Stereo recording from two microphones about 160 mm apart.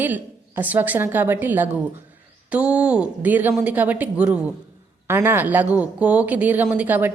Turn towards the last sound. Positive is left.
turn(degrees=-10)  # may be behind; listen again after turning